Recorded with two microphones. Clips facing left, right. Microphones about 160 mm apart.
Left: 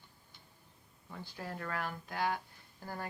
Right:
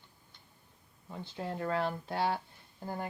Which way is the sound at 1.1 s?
20° right (ahead or behind).